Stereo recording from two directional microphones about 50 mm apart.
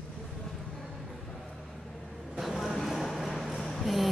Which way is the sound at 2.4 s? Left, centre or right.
Centre.